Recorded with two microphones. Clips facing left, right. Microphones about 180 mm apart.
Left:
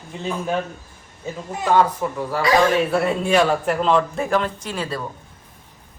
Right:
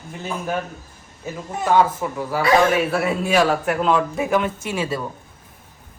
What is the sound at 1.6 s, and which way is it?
A man's voice, 5° right (ahead or behind).